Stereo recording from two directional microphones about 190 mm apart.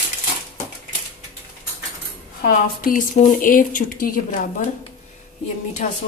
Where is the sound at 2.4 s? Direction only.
50° left (ahead or behind).